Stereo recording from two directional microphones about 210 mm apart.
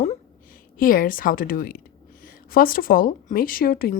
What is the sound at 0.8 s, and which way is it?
A woman's voice, 40° left (ahead or behind).